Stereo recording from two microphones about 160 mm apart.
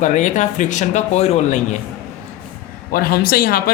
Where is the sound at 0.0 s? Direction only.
50° left (ahead or behind).